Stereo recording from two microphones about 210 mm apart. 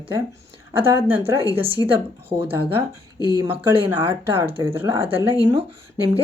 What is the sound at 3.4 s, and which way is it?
Speech, 10° right (ahead or behind).